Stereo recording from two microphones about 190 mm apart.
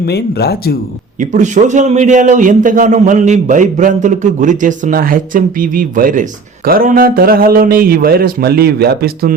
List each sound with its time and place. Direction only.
0.0 s speech: 60° left (ahead or behind)
1.2 s a man's voice: 40° right (ahead or behind)